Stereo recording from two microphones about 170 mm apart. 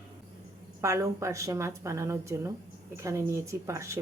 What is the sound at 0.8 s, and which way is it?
A woman's voice, 15° right (ahead or behind).